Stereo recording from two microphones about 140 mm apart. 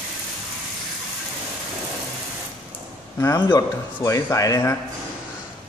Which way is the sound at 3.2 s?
25° left (ahead or behind).